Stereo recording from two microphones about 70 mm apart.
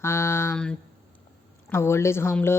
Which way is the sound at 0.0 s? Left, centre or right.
Left.